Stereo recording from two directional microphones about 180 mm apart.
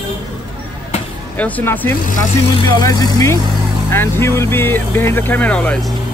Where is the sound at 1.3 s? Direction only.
10° left (ahead or behind).